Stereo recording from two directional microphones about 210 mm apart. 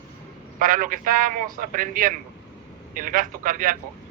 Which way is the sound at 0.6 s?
40° right (ahead or behind).